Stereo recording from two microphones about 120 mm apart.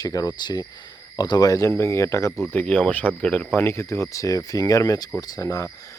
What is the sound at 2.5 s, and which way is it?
Speech, 10° left (ahead or behind).